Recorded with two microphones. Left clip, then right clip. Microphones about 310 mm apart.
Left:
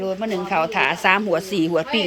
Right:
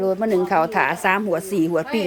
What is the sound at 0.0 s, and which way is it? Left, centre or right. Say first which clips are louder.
Speech: right 5 dB; centre.